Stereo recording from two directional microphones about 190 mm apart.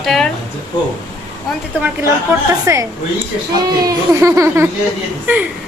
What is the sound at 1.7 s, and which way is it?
A child's voice, 10° right (ahead or behind).